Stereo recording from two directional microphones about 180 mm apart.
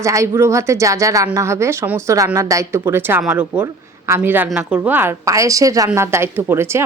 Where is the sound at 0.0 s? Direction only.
15° right (ahead or behind).